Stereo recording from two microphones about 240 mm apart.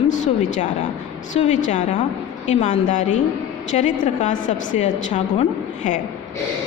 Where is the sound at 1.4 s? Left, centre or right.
Left.